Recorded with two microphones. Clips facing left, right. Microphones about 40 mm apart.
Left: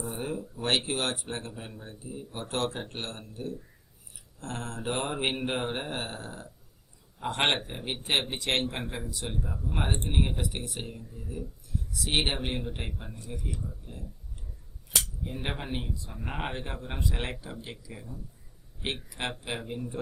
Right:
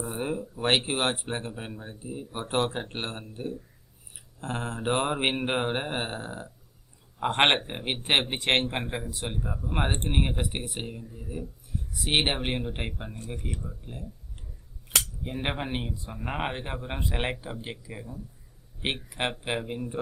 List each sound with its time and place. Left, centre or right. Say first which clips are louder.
0.0 s speech: right 3 dB; centre
8.6 s speech: right 3 dB; right
13.1 s speech: right 2 dB; right
13.7 s speech: right 3 dB; right
15.2 s speech: right 4 dB; right